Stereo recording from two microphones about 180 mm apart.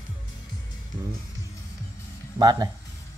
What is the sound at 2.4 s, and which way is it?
Speech, 20° right (ahead or behind).